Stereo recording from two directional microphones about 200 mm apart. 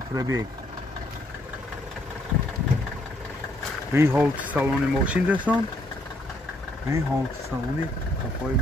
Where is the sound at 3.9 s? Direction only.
10° right (ahead or behind).